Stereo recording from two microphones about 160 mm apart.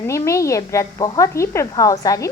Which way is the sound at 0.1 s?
20° left (ahead or behind).